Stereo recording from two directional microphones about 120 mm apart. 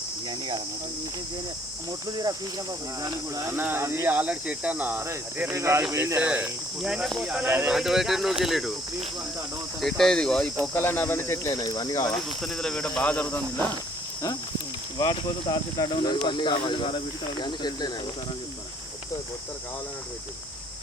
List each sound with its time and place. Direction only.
0.3 s speech: 40° right (ahead or behind)
3.0 s speech: 25° right (ahead or behind); by 7.4 s 5° right (ahead or behind)
7.4 s speech: 15° right (ahead or behind)
7.7 s speech: 5° right (ahead or behind)
10.8 s speech: 15° left (ahead or behind)
12.4 s speech: 5° left (ahead or behind)
14.9 s speech: 40° left (ahead or behind)